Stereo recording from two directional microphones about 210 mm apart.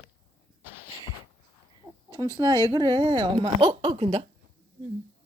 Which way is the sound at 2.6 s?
20° right (ahead or behind).